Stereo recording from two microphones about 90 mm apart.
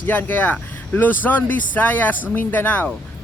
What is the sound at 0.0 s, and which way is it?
Speech, 20° left (ahead or behind).